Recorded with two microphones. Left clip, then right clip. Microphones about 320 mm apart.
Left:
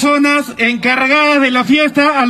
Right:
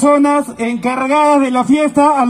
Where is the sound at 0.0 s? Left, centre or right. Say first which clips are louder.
Right 1 dB; centre.